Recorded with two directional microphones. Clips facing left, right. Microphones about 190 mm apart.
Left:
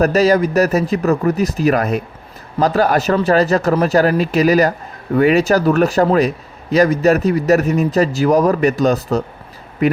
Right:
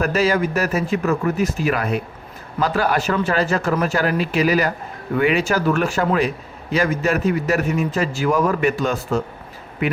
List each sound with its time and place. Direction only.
0.0 s a man's voice: 40° left (ahead or behind)